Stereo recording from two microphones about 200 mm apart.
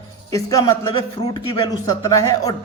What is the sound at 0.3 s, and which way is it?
A man's voice, 15° left (ahead or behind).